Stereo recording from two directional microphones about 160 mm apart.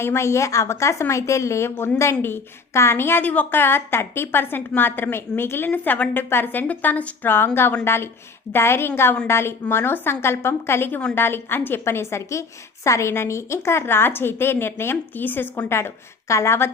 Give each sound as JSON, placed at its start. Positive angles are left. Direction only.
{"t": 0.0, "sound": "a woman's voice", "side_deg": 15}